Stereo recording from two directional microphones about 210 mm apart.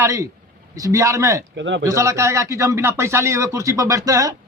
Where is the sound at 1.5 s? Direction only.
60° right (ahead or behind).